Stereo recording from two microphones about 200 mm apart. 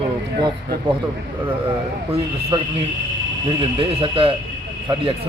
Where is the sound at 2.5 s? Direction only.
25° right (ahead or behind).